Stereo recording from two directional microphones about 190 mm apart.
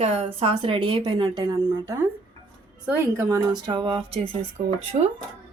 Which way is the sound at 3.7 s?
25° right (ahead or behind).